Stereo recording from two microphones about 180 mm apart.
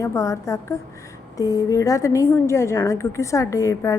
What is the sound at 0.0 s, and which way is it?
A woman's voice, 15° left (ahead or behind).